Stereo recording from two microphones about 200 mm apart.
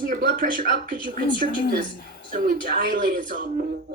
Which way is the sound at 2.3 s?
45° right (ahead or behind).